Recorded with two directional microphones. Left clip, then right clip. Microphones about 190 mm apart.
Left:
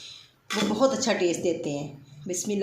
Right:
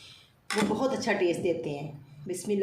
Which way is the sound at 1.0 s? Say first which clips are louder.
Left 2 dB; 35° left (ahead or behind).